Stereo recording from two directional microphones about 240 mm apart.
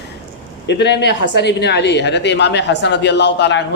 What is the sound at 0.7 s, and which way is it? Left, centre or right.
A man's voice, left.